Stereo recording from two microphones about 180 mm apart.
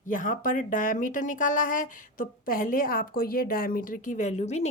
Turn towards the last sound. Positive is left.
turn(degrees=40)  # may be behind; listen again after turning